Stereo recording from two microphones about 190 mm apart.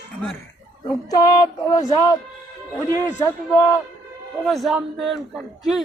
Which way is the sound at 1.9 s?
20° left (ahead or behind).